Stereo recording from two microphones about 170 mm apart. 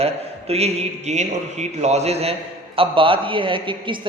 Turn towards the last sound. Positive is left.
turn(degrees=-30)  # may be behind; listen again after turning